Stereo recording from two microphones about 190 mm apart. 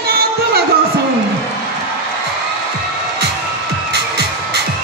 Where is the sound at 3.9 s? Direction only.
60° right (ahead or behind).